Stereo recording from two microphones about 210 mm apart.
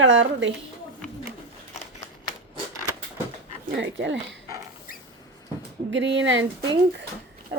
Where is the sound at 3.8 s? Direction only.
60° right (ahead or behind).